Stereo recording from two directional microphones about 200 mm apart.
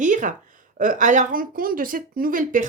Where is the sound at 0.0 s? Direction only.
40° right (ahead or behind).